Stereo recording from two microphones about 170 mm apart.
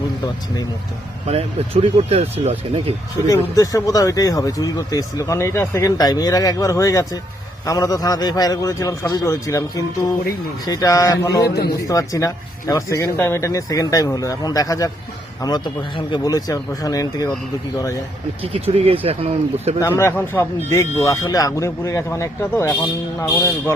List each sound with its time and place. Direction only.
1.3 s speech: 35° right (ahead or behind)
3.2 s speech: 20° left (ahead or behind)
11.4 s a man's voice: 70° left (ahead or behind)
11.9 s speech: 20° left (ahead or behind)
18.5 s speech: 35° right (ahead or behind)
19.8 s speech: 15° left (ahead or behind)